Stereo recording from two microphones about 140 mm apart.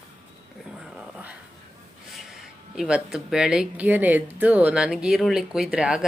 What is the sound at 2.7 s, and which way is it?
Speech, 5° right (ahead or behind).